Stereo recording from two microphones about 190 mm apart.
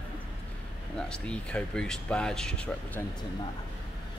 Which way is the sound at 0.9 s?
5° left (ahead or behind).